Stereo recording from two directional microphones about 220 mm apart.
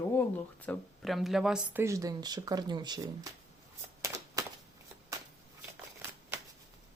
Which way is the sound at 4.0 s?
15° right (ahead or behind).